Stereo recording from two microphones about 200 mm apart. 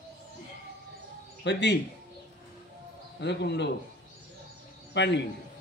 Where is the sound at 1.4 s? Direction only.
60° left (ahead or behind).